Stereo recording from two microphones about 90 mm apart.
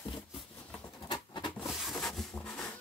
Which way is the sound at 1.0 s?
60° left (ahead or behind).